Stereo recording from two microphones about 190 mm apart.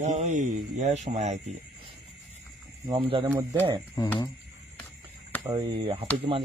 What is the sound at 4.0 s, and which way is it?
Speech, 20° left (ahead or behind).